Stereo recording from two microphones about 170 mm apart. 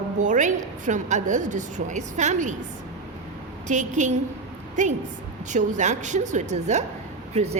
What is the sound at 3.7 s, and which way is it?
Speech, 45° right (ahead or behind).